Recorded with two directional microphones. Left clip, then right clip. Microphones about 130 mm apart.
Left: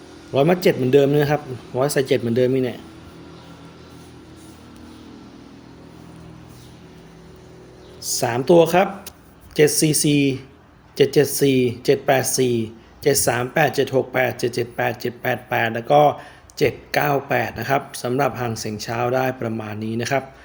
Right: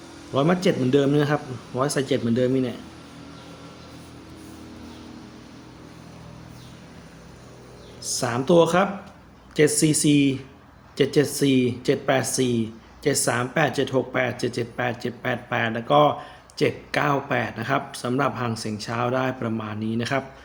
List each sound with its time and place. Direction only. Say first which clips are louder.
0.3 s speech: left 4 dB; 50° left (ahead or behind)
8.0 s speech: left 5 dB; 50° left (ahead or behind)